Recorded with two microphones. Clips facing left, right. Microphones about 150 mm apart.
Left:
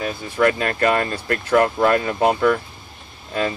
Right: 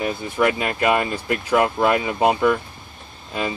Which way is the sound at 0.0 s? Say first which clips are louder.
Left 1 dB; 15° right (ahead or behind).